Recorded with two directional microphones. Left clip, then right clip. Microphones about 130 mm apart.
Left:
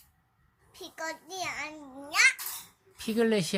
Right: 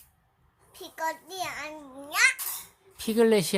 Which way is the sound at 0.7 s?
20° right (ahead or behind).